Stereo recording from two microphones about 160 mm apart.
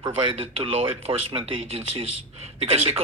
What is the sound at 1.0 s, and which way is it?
Speech, 35° right (ahead or behind).